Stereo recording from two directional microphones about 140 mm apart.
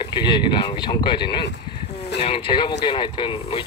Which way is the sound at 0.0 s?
35° left (ahead or behind).